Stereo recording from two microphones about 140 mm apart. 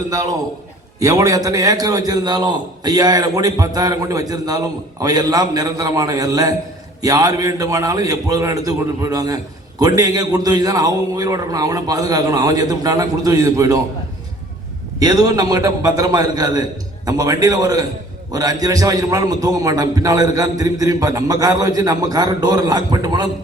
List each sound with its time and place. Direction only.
0.1 s a man's voice: 25° right (ahead or behind)
14.9 s a man's voice: 30° right (ahead or behind)